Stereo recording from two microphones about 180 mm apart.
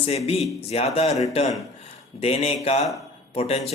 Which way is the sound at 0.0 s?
35° left (ahead or behind).